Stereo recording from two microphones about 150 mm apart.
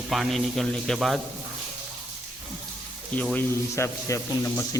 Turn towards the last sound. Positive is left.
turn(degrees=20)  # may be behind; listen again after turning